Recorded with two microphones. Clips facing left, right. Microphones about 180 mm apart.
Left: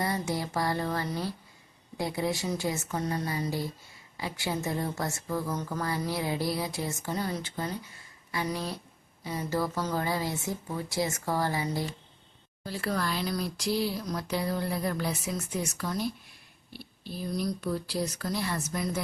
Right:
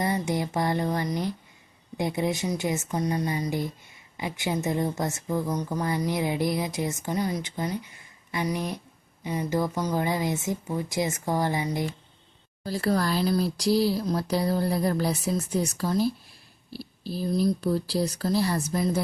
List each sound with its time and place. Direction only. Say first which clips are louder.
0.0 s a woman's voice: right 4 dB; 20° right (ahead or behind)
12.6 s speech: right 6 dB; 35° right (ahead or behind)